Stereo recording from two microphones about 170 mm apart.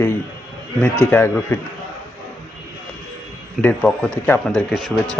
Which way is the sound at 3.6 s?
10° left (ahead or behind).